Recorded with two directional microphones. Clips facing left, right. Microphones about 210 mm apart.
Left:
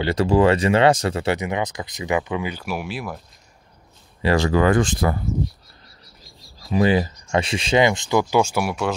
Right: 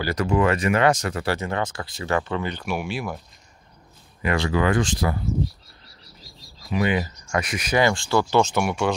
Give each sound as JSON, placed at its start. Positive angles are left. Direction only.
{"t": 0.0, "sound": "speech", "side_deg": 30}
{"t": 4.2, "sound": "speech", "side_deg": 35}
{"t": 4.8, "sound": "speech", "side_deg": 55}
{"t": 6.7, "sound": "speech", "side_deg": 30}